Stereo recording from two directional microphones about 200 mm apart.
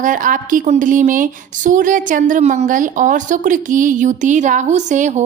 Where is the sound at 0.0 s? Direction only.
40° right (ahead or behind).